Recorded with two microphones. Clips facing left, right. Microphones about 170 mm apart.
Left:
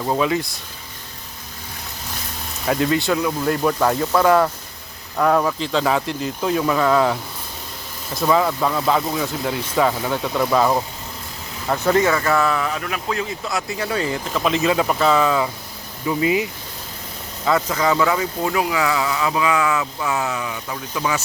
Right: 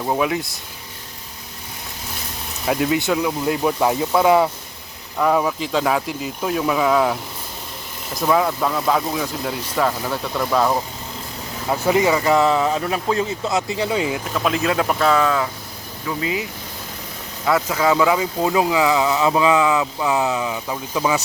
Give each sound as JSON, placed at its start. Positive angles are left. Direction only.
{"t": 0.0, "sound": "speech", "side_deg": -10}
{"t": 2.6, "sound": "speech", "side_deg": -5}
{"t": 8.2, "sound": "speech", "side_deg": -5}
{"t": 11.7, "sound": "speech", "side_deg": -10}
{"t": 14.3, "sound": "speech", "side_deg": 0}
{"t": 16.0, "sound": "speech", "side_deg": 20}
{"t": 17.4, "sound": "speech", "side_deg": -5}